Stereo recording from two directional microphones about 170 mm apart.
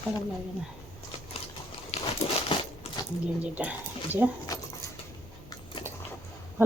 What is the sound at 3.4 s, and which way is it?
Speech, 10° right (ahead or behind).